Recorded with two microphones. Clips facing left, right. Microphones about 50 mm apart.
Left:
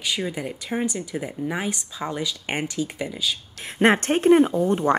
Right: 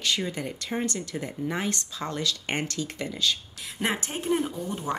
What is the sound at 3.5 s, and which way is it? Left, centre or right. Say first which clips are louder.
Speech: left 10 dB; left.